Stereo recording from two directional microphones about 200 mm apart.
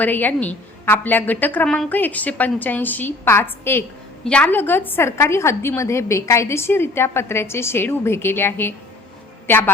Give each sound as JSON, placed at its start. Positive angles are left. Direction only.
{"t": 0.0, "sound": "a woman's voice", "side_deg": 10}